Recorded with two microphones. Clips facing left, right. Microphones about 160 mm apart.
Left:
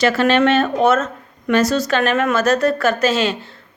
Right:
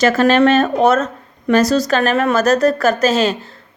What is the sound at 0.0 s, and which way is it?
Speech, 45° right (ahead or behind).